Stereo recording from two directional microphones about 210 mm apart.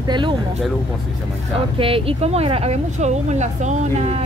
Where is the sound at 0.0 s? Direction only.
20° right (ahead or behind).